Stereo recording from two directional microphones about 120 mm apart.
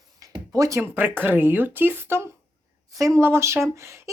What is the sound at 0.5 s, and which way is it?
Speech, 30° right (ahead or behind).